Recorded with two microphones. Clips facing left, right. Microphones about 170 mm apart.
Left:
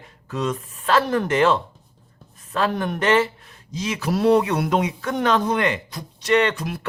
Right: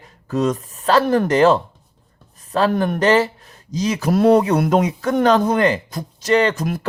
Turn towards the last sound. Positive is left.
turn(degrees=-45)  # may be behind; listen again after turning